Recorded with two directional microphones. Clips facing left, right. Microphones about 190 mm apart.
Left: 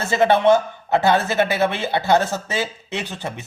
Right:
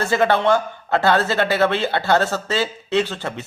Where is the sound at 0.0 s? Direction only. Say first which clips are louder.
Left 1 dB; 20° left (ahead or behind).